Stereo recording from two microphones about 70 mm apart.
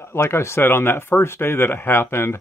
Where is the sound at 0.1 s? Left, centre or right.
Left.